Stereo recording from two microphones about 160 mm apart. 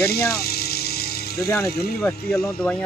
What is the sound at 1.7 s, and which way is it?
Speech, 75° left (ahead or behind).